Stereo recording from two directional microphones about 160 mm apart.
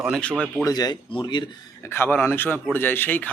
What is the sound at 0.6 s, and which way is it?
Speech, 25° left (ahead or behind).